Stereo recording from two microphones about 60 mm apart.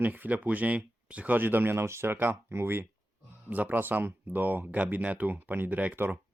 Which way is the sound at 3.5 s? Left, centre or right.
Right.